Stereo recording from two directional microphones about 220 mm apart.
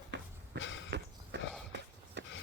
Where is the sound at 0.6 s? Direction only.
60° left (ahead or behind).